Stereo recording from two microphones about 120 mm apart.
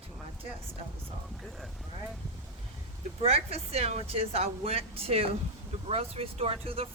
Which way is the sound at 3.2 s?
60° right (ahead or behind).